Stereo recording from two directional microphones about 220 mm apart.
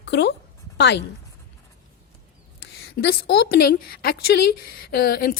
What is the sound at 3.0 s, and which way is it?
A woman's voice, 50° left (ahead or behind).